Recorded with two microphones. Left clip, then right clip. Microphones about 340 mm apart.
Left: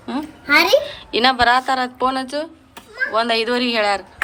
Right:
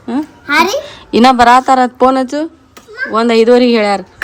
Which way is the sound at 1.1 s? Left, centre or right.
Right.